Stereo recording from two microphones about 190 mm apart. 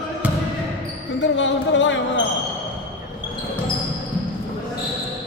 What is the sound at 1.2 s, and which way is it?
Speech, 75° left (ahead or behind).